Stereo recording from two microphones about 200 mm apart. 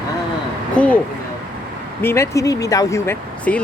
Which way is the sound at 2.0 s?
15° left (ahead or behind).